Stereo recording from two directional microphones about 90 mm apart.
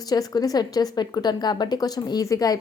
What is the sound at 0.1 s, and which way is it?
A woman's voice, 45° left (ahead or behind).